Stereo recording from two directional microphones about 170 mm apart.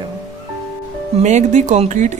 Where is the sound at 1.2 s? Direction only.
45° right (ahead or behind).